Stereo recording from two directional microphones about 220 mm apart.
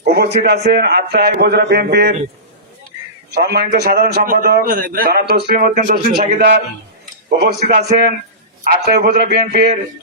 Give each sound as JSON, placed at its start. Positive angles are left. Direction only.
{"t": 0.0, "sound": "a man's voice", "side_deg": -45}
{"t": 3.3, "sound": "a man's voice", "side_deg": -45}
{"t": 7.3, "sound": "speech", "side_deg": -35}
{"t": 8.6, "sound": "a man's voice", "side_deg": -45}